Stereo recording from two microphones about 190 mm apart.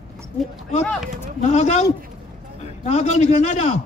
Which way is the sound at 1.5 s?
40° left (ahead or behind).